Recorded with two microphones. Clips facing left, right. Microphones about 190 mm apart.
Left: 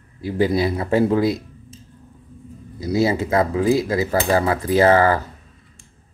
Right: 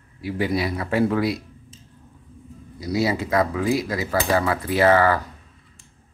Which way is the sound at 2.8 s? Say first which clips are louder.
Left 4 dB; 25° left (ahead or behind).